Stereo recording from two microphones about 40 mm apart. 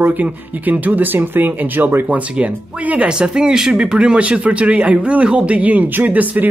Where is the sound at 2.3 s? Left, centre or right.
Right.